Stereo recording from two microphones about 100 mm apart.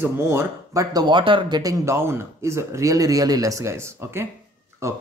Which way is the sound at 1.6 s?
30° right (ahead or behind).